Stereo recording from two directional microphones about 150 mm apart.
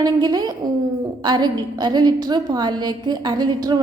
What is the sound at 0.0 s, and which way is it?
A woman's voice, 25° right (ahead or behind).